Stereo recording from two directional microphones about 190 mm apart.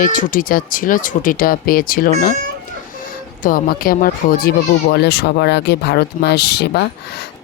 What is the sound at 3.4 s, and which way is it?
Speech, 50° left (ahead or behind).